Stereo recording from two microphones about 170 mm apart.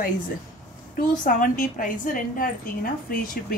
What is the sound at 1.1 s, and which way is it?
Speech, 50° left (ahead or behind).